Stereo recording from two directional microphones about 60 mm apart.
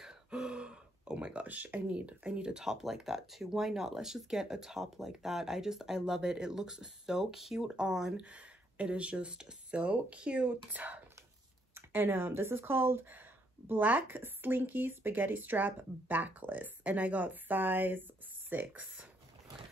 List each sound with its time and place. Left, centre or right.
0.0 s speech: centre